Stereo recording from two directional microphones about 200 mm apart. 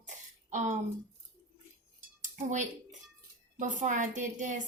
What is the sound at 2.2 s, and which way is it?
Dishes, 35° right (ahead or behind).